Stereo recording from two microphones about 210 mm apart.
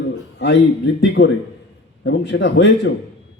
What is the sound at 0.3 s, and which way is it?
A man's voice, 55° left (ahead or behind).